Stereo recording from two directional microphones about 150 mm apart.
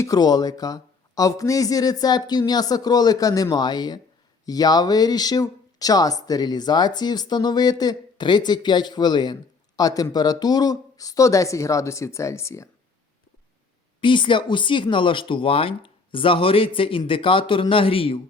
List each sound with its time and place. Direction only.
0.0 s speech: 25° left (ahead or behind)
14.0 s speech: 35° left (ahead or behind)